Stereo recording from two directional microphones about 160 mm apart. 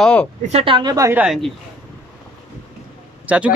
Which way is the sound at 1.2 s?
5° right (ahead or behind).